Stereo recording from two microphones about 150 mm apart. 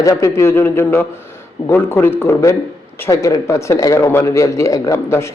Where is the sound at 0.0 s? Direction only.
20° left (ahead or behind).